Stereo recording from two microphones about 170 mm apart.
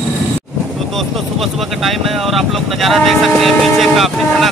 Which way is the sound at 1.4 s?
Centre (ahead or behind).